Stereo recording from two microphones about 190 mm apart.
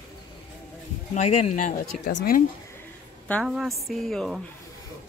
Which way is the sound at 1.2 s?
35° left (ahead or behind).